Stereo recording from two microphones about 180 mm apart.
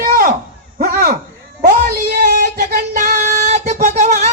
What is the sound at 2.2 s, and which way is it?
Music, 55° right (ahead or behind).